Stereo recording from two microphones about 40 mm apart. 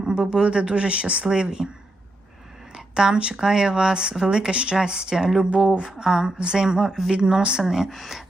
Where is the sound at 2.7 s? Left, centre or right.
Centre.